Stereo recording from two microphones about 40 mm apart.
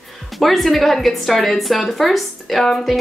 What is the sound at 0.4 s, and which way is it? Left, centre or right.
A woman's voice, centre.